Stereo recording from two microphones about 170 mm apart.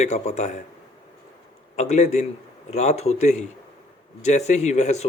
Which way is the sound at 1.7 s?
40° left (ahead or behind).